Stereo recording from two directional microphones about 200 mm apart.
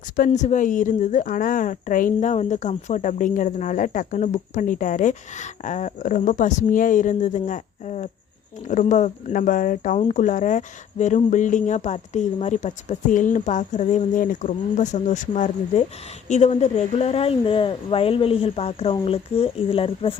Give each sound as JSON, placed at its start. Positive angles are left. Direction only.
{"t": 0.2, "sound": "speech", "side_deg": 35}